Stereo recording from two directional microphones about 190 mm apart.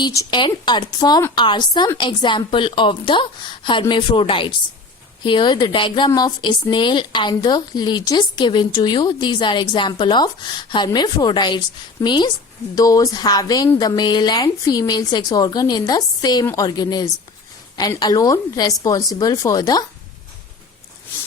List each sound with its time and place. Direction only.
0.0 s speech: 20° left (ahead or behind)